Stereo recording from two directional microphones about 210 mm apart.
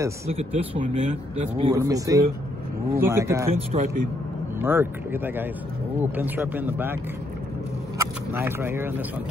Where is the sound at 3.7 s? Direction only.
30° right (ahead or behind).